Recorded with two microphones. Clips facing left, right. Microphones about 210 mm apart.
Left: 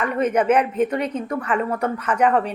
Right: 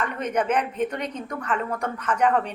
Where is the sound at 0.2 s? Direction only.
10° left (ahead or behind).